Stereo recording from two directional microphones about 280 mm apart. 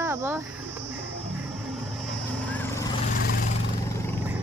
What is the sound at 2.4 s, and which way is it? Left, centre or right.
Vehicle, centre.